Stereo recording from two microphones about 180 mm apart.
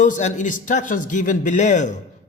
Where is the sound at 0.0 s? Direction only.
45° left (ahead or behind).